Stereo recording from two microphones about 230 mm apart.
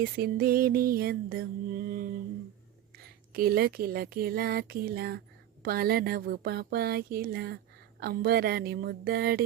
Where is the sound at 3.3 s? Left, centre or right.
Right.